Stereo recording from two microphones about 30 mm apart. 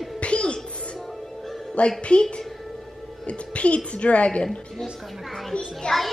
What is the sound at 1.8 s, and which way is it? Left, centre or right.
Speech, left.